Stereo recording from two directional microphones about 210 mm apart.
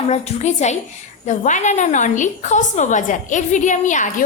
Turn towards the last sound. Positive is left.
turn(degrees=35)  # may be behind; listen again after turning